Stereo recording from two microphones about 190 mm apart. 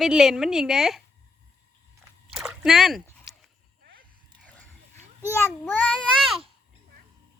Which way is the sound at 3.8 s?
55° right (ahead or behind).